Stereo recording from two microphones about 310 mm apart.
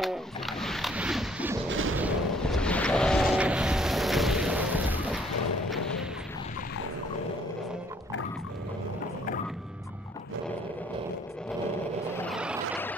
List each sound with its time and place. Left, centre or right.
0.0 s pigeon: centre
1.7 s artillery fire: right
2.0 s a sound: centre
12.2 s vehicle: centre